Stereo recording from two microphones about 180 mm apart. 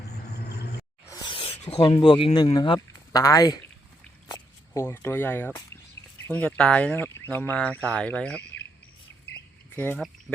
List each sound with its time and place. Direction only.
0.4 s vehicle: 65° left (ahead or behind)
1.0 s speech: 20° left (ahead or behind)
9.7 s speech: 10° left (ahead or behind)